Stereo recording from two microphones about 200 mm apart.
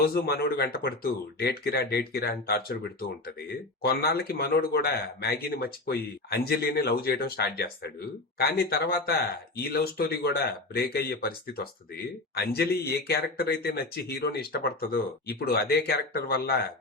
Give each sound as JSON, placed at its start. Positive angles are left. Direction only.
{"t": 0.1, "sound": "speech", "side_deg": 50}